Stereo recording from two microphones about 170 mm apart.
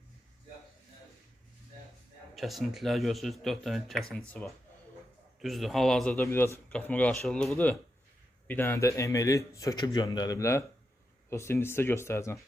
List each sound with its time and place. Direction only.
2.3 s a man's voice: centre (ahead or behind); by 12.4 s 15° left (ahead or behind)